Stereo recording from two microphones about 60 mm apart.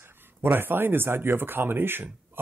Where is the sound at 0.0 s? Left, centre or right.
Right.